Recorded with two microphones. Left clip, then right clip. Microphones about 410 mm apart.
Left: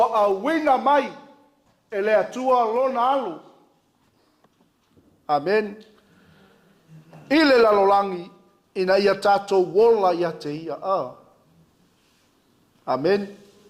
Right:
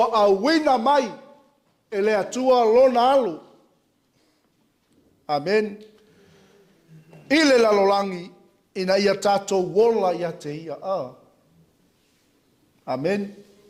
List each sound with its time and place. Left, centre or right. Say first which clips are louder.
0.0 s speech: right 1 dB; right
5.2 s a man's voice: left 1 dB; right
7.3 s a man's voice: left 1 dB; right
12.8 s a man's voice: left 3 dB; right